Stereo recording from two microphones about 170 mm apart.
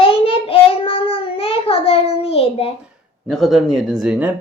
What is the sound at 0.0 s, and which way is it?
Child singing, 35° left (ahead or behind).